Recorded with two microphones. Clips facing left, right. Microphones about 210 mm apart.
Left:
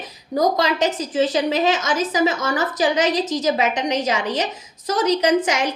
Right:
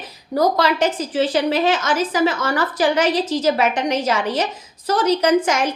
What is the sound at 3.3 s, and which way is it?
Speech, 15° left (ahead or behind).